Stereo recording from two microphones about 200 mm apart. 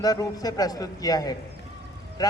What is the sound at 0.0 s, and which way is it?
Speech, 20° left (ahead or behind).